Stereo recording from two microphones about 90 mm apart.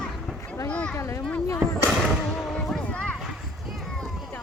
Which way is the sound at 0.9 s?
30° left (ahead or behind).